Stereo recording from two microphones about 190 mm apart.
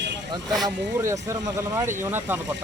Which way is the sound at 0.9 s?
15° right (ahead or behind).